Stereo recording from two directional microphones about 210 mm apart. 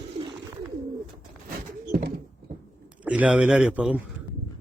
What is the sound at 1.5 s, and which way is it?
Pigeon, 50° right (ahead or behind).